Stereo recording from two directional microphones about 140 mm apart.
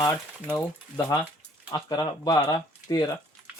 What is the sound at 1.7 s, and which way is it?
Speech, 30° left (ahead or behind).